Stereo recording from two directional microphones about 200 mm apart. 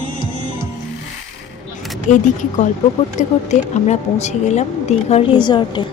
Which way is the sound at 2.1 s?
40° left (ahead or behind).